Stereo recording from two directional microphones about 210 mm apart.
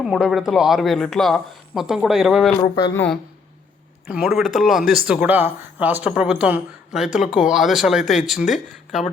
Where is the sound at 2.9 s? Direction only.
5° left (ahead or behind).